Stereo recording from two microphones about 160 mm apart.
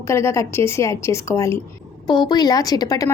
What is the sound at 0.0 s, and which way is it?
A woman's voice, 15° left (ahead or behind).